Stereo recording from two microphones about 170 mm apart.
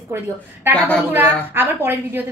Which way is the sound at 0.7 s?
10° left (ahead or behind).